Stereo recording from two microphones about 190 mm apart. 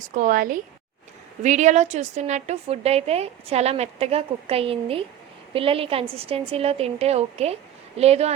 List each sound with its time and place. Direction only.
0.0 s a woman's voice: 45° right (ahead or behind)